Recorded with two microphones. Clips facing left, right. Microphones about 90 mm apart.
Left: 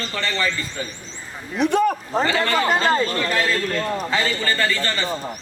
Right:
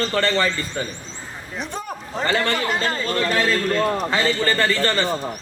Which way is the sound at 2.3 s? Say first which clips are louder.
Even; 40° left (ahead or behind).